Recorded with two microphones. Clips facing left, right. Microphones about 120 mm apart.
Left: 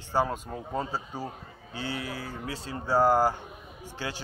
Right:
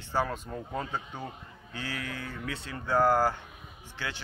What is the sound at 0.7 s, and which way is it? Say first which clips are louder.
Speech: left 3 dB; 30° left (ahead or behind).